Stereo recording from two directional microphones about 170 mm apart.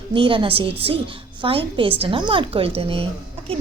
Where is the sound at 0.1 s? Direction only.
30° right (ahead or behind).